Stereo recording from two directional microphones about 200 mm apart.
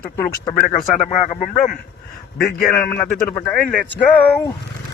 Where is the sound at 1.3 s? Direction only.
40° left (ahead or behind).